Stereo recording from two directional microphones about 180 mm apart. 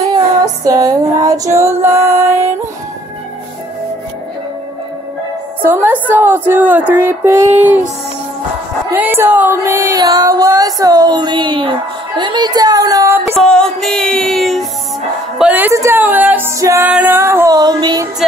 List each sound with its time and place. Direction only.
0.7 s music: 20° right (ahead or behind)
5.6 s a woman's voice: 10° right (ahead or behind)
8.9 s a sound: 10° right (ahead or behind)
13.4 s music: 5° left (ahead or behind)
15.3 s a woman's voice: 10° right (ahead or behind)